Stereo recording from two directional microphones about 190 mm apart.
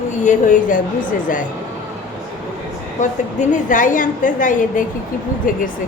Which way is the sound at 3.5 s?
45° left (ahead or behind).